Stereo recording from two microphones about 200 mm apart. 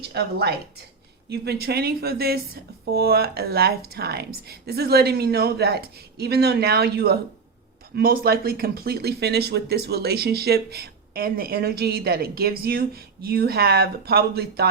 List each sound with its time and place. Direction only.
0.1 s a woman's voice: 55° right (ahead or behind)